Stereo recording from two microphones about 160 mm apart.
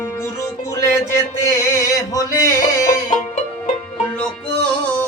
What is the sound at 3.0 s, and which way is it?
Music, 50° left (ahead or behind).